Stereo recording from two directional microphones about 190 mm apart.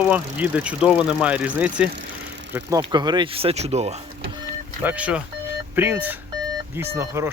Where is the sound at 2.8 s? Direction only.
20° right (ahead or behind).